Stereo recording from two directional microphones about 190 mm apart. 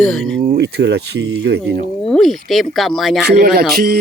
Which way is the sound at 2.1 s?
Centre (ahead or behind).